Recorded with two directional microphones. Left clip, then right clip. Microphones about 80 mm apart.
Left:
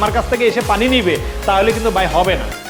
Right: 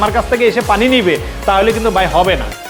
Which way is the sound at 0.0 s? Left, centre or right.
Right.